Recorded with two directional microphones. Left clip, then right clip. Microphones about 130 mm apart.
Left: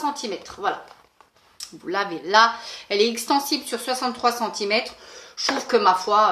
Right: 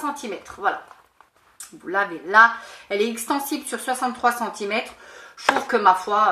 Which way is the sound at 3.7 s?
5° left (ahead or behind).